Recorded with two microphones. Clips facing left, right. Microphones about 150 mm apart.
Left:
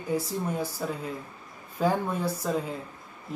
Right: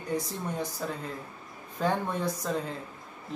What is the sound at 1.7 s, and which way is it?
Speech, 10° left (ahead or behind).